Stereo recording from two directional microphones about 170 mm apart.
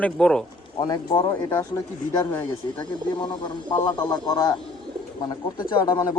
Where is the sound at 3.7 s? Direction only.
25° left (ahead or behind).